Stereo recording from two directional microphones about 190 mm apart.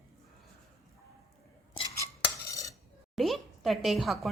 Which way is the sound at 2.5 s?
15° left (ahead or behind).